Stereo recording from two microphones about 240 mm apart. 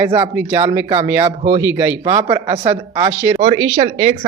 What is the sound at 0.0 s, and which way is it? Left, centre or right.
Speech, centre.